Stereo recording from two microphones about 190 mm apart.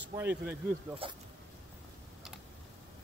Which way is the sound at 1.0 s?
30° right (ahead or behind).